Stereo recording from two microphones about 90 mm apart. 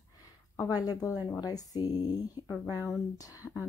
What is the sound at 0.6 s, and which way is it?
Speech, 40° left (ahead or behind).